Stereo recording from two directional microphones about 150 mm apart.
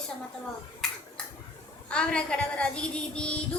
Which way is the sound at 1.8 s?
5° left (ahead or behind).